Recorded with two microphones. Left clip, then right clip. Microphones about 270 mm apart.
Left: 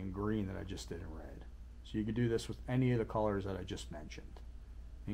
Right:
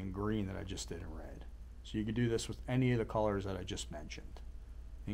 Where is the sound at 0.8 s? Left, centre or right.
Right.